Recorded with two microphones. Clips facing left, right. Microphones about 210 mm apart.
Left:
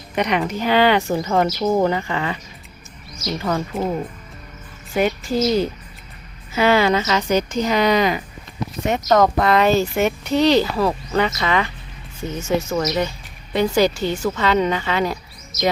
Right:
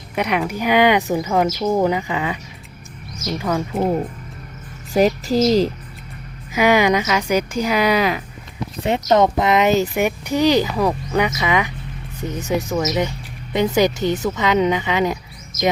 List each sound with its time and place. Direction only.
0.2 s speech: 5° right (ahead or behind)
3.5 s speech: 5° right (ahead or behind)
4.9 s a woman's voice: 40° right (ahead or behind)
6.5 s speech: 15° right (ahead or behind)
8.9 s speech: 25° right (ahead or behind)